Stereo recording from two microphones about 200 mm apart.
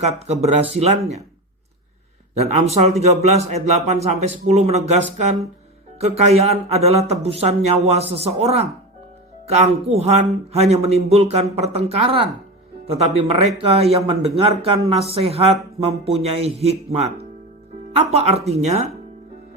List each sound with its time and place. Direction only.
0.0 s a man's voice: 30° right (ahead or behind)
2.3 s a man's voice: 30° right (ahead or behind)